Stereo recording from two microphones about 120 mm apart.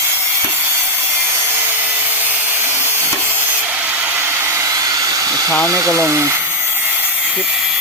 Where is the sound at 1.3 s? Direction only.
20° right (ahead or behind).